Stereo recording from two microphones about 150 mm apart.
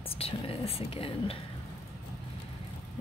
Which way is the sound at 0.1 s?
40° left (ahead or behind).